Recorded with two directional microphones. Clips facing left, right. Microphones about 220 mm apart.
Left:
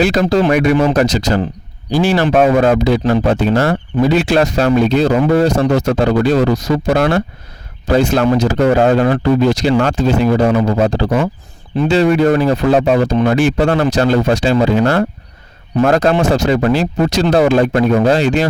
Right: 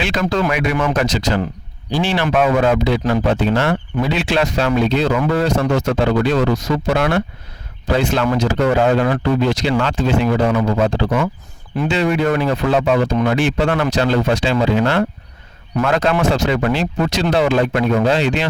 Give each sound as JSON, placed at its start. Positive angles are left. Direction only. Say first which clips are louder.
{"t": 0.0, "sound": "speech", "louder": "left 6 dB", "side_deg": 40}